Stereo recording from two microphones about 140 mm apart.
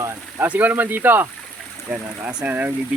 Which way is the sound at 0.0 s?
15° right (ahead or behind).